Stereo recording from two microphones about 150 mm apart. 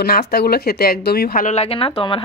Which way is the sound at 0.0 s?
90° left.